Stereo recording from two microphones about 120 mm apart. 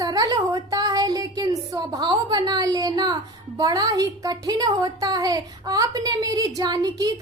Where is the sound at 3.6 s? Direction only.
35° right (ahead or behind).